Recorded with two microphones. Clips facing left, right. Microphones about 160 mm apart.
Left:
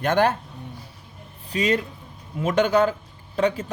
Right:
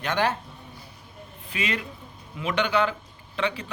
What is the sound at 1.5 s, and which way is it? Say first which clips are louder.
A man's voice: left 8 dB; 40° left (ahead or behind).